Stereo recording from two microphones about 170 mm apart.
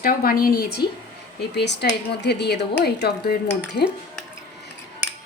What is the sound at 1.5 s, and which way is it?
A woman's voice, 85° left.